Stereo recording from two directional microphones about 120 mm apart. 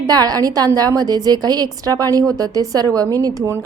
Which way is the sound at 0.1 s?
30° right (ahead or behind).